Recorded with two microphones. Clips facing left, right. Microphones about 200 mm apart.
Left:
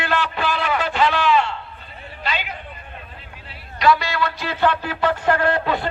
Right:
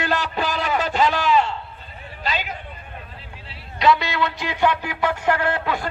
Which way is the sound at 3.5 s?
20° right (ahead or behind).